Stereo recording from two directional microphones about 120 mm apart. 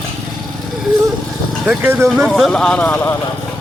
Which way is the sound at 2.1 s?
Centre (ahead or behind).